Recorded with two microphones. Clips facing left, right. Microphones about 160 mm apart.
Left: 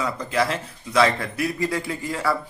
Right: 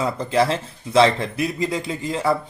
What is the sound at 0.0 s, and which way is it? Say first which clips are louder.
Speech: right 4 dB; 25° right (ahead or behind).